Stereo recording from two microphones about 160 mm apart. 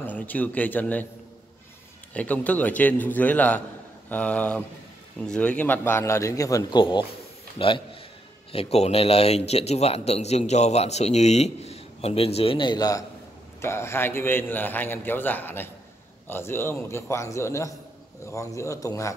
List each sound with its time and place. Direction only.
0.0 s a man's voice: 10° left (ahead or behind)
2.1 s a man's voice: 10° left (ahead or behind)